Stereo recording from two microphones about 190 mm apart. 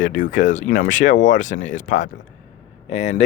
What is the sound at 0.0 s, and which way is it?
Speech, 40° left (ahead or behind).